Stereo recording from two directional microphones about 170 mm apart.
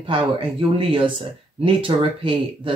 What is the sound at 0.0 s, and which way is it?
Speech, 30° right (ahead or behind).